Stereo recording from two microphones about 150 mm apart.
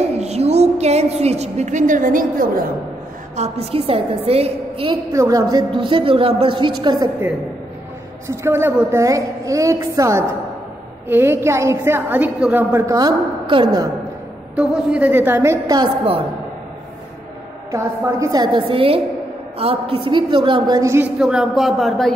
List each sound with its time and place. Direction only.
0.2 s a woman's voice: 45° right (ahead or behind); by 2.6 s 65° right (ahead or behind)
3.3 s a woman's voice: 45° right (ahead or behind)
5.1 s a woman's voice: 20° right (ahead or behind)
8.3 s a woman's voice: 20° right (ahead or behind)
12.8 s a woman's voice: 20° right (ahead or behind)
14.5 s a woman's voice: 5° right (ahead or behind); by 15.9 s 25° right (ahead or behind)
17.6 s a woman's voice: 20° right (ahead or behind)
21.2 s speech: 5° right (ahead or behind)